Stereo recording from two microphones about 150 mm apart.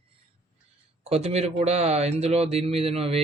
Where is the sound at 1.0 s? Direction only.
45° right (ahead or behind).